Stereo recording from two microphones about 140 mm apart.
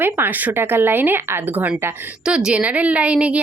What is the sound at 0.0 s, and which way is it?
A woman's voice, 15° right (ahead or behind).